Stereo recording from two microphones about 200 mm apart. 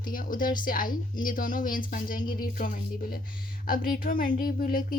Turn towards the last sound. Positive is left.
turn(degrees=45)  # may be behind; listen again after turning